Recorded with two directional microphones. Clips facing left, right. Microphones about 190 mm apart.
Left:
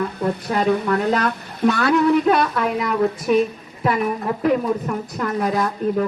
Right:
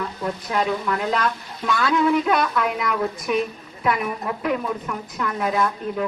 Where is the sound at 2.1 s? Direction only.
35° left (ahead or behind).